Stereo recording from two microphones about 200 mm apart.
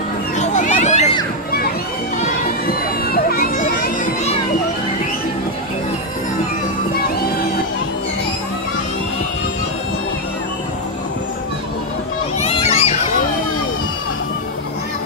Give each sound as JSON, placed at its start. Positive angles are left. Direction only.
{"t": 0.4, "sound": "a sound", "side_deg": 35}
{"t": 2.6, "sound": "children playing", "side_deg": 50}
{"t": 12.4, "sound": "children playing", "side_deg": 30}